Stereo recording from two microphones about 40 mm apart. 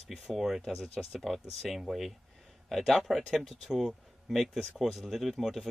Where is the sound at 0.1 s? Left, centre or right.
Centre.